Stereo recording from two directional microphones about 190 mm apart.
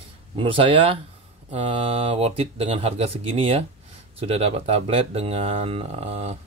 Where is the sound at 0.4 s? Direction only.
30° right (ahead or behind).